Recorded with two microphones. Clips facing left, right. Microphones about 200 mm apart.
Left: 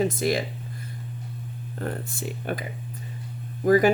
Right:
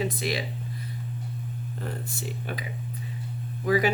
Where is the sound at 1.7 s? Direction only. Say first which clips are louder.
Left 6 dB; 55° left (ahead or behind).